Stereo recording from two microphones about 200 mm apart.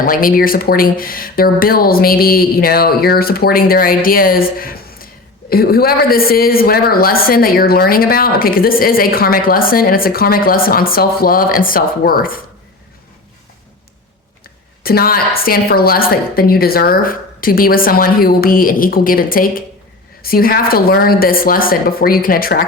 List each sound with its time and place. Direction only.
0.0 s a woman's voice: 45° left (ahead or behind)
14.8 s a woman's voice: 50° left (ahead or behind)